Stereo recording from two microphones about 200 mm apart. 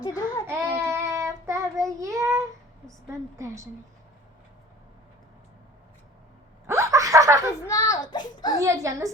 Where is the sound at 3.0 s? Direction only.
15° right (ahead or behind).